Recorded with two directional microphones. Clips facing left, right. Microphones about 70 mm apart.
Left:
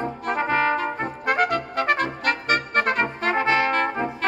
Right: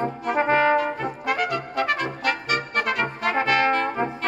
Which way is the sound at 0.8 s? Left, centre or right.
Left.